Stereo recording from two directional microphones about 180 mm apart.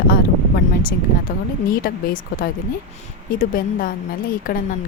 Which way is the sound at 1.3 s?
50° left (ahead or behind).